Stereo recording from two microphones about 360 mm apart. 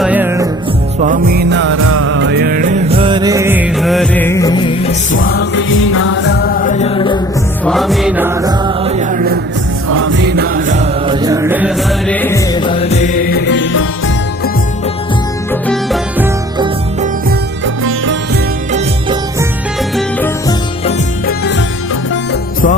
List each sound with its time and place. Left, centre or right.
0.0 s music: centre
0.9 s music: right; by 5.2 s centre
5.2 s music: left; by 7.2 s centre
7.6 s music: centre; by 9.4 s right
9.9 s music: right; by 13.8 s left
15.6 s music: centre
17.8 s music: right
18.7 s music: centre
20.0 s music: centre
20.8 s music: left